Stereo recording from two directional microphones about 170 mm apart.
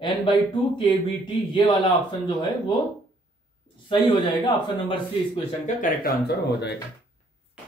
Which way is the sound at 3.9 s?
25° left (ahead or behind).